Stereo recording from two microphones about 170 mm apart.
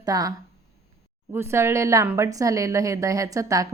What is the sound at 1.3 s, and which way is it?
A woman's voice, 15° right (ahead or behind).